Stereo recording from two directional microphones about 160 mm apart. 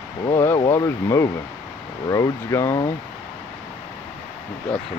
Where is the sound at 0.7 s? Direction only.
20° left (ahead or behind).